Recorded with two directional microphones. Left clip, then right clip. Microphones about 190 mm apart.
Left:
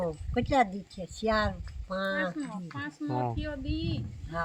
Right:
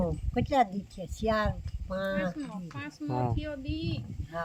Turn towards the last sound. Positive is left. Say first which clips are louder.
# left 1 dB
turn(degrees=-15)  # may be behind; listen again after turning